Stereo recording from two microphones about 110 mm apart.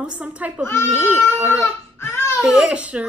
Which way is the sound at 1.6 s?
20° left (ahead or behind).